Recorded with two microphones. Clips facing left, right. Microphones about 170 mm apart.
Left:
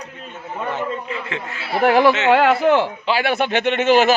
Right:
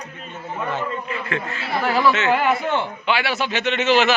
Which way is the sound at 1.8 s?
60° left (ahead or behind).